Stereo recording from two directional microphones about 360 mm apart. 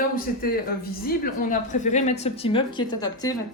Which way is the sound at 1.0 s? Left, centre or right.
Left.